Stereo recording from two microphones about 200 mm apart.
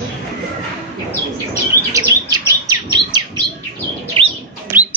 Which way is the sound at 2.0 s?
15° right (ahead or behind).